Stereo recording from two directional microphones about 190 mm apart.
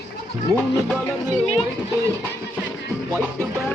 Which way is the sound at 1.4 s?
30° left (ahead or behind).